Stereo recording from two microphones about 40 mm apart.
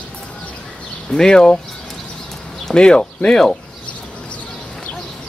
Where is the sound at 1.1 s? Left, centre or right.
Centre.